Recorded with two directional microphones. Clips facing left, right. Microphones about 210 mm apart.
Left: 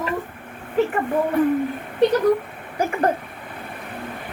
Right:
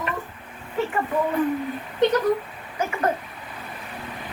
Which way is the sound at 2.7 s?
35° left (ahead or behind).